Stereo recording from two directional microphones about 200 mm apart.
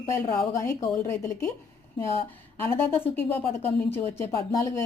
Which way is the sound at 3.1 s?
10° left (ahead or behind).